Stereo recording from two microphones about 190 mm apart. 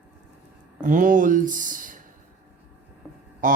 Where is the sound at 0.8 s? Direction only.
45° right (ahead or behind).